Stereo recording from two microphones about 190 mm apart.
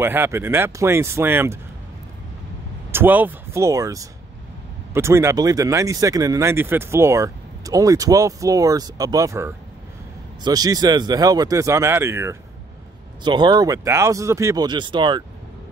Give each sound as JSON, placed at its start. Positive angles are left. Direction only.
{"t": 0.0, "sound": "speech", "side_deg": -10}
{"t": 2.9, "sound": "speech", "side_deg": -10}